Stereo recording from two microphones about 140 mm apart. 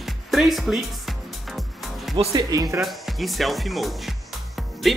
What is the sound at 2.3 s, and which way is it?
Speech, 25° right (ahead or behind).